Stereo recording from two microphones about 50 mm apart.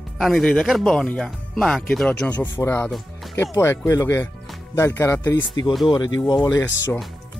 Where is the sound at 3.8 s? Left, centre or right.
Left.